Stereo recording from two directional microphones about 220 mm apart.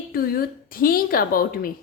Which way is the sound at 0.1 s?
40° left (ahead or behind).